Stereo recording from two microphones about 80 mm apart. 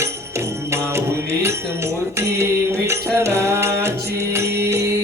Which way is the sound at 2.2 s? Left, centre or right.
Right.